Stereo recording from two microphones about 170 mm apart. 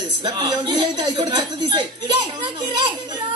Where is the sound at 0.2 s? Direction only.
25° right (ahead or behind).